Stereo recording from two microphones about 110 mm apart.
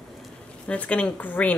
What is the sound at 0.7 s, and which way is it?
Speech, 10° left (ahead or behind).